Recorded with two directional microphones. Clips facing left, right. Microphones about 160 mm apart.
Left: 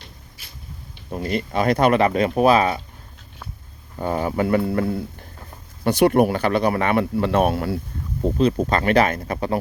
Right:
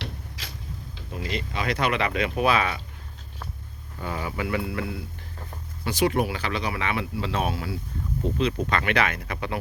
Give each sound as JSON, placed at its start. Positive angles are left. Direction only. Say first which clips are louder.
{"t": 0.0, "sound": "vehicle", "louder": "right 9 dB", "side_deg": -90}
{"t": 1.1, "sound": "speech", "louder": "left 8 dB", "side_deg": 45}
{"t": 3.9, "sound": "speech", "louder": "left 9 dB", "side_deg": 40}
{"t": 5.8, "sound": "speech", "louder": "left 8 dB", "side_deg": 60}
{"t": 8.4, "sound": "speech", "louder": "left 7 dB", "side_deg": 40}